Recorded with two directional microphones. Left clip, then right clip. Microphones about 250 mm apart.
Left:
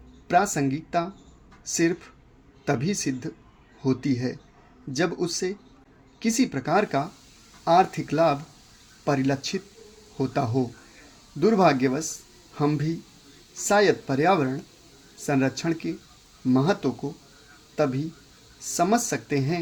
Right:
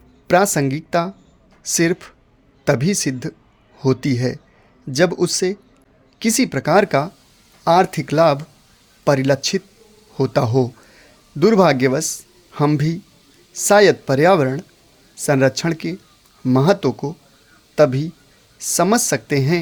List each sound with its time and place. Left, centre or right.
0.3 s speech: right